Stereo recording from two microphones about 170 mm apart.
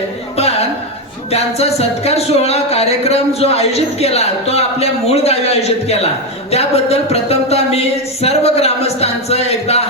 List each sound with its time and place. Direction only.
1.3 s music: 40° left (ahead or behind)